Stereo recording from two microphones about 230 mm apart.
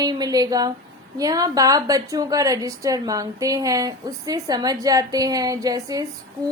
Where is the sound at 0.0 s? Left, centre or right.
Centre.